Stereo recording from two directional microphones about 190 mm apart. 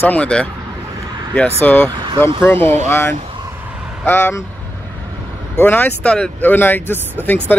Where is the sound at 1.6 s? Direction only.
10° left (ahead or behind).